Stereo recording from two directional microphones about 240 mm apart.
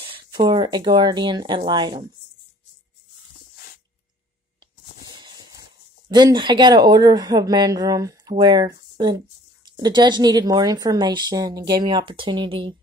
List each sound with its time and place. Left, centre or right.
0.0 s speech: right
5.0 s a sound: centre
6.0 s a woman's voice: centre